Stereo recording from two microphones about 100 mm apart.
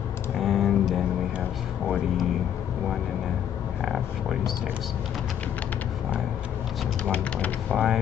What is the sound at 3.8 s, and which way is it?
Speech, centre (ahead or behind).